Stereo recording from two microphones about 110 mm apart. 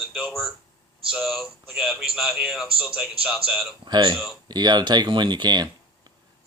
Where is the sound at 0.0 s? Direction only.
5° right (ahead or behind).